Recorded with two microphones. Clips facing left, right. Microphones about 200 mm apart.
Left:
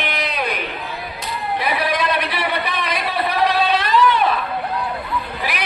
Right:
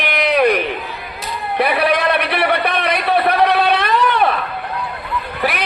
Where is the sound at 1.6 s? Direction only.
65° right (ahead or behind).